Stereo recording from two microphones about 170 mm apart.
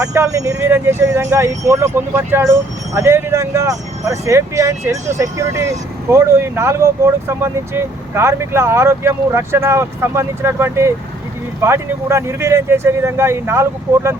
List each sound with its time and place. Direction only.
0.0 s speech: 20° right (ahead or behind)